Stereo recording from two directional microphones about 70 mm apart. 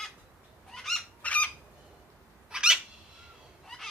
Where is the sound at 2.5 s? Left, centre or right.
Centre.